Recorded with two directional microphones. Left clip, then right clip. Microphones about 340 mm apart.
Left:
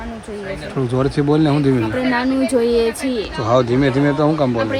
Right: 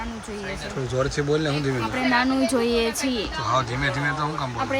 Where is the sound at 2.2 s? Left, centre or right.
Centre.